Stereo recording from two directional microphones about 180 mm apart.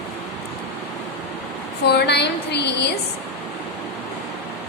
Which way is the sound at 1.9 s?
65° left (ahead or behind).